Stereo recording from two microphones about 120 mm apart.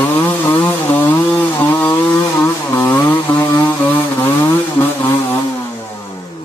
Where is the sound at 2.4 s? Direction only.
15° left (ahead or behind).